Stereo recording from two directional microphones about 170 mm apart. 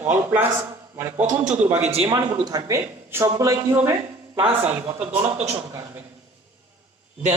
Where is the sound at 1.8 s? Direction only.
35° right (ahead or behind).